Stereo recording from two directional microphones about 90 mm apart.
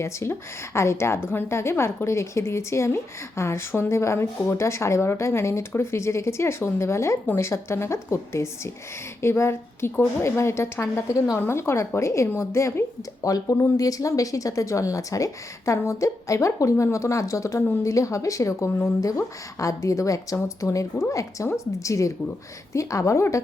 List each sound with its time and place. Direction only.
0.0 s a woman's voice: 30° left (ahead or behind)